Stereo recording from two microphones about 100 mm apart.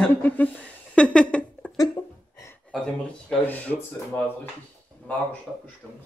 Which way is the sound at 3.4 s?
15° left (ahead or behind).